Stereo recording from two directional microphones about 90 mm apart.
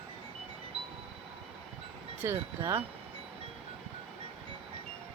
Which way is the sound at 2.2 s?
30° right (ahead or behind).